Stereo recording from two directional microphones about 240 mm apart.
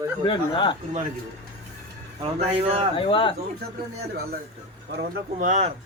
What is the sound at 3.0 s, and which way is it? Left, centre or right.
Speech, left.